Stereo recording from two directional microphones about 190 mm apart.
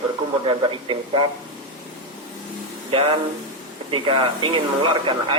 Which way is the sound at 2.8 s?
30° right (ahead or behind).